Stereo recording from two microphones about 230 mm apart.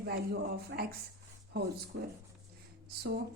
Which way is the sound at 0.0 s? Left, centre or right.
Right.